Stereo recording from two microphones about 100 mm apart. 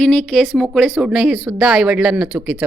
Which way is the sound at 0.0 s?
5° left (ahead or behind).